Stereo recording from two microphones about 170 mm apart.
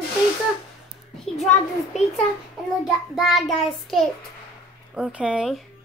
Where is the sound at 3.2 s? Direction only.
Centre (ahead or behind).